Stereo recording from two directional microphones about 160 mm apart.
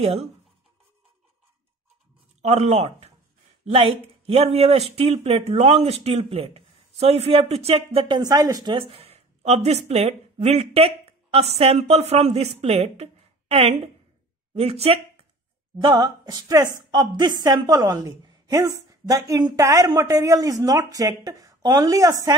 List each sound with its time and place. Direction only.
0.0 s speech: 40° right (ahead or behind)
2.4 s speech: 45° right (ahead or behind)
8.2 s a woman's voice: 20° right (ahead or behind)
8.7 s speech: 35° right (ahead or behind)
15.8 s a woman's voice: 25° right (ahead or behind)